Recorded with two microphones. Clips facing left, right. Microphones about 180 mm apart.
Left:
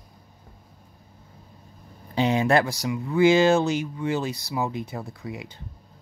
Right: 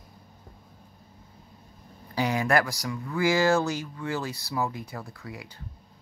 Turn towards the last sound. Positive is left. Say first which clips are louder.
# left 5 dB
turn(degrees=20)  # may be behind; listen again after turning